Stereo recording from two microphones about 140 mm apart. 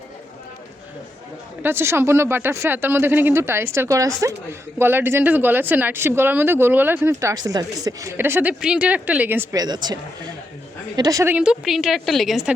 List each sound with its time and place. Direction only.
1.6 s speech: 15° right (ahead or behind)
9.6 s speech: 30° right (ahead or behind)
11.3 s a woman's voice: 5° right (ahead or behind)